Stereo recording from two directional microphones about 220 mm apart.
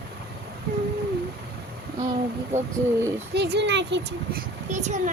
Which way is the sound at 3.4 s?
50° right (ahead or behind).